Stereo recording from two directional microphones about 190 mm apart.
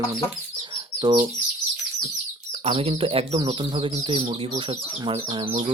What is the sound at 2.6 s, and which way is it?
Speech, 30° right (ahead or behind).